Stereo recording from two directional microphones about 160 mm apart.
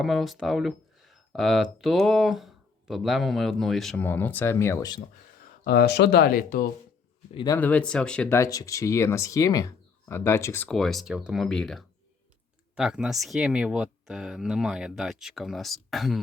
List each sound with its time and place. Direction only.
0.0 s speech: centre (ahead or behind); by 4.9 s 15° left (ahead or behind)
5.6 s speech: 80° left
7.3 s speech: 20° left (ahead or behind)
7.6 s speech: 10° left (ahead or behind)
8.4 s speech: 20° left (ahead or behind); by 16.2 s centre (ahead or behind)